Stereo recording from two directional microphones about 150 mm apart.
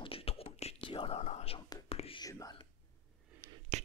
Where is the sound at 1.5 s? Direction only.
30° left (ahead or behind).